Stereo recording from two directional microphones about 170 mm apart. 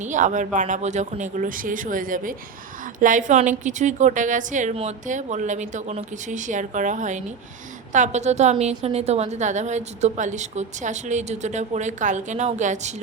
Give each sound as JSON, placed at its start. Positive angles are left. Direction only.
{"t": 0.0, "sound": "a woman's voice", "side_deg": -45}